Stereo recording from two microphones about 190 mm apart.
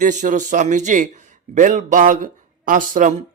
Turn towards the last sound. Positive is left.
turn(degrees=-45)  # may be behind; listen again after turning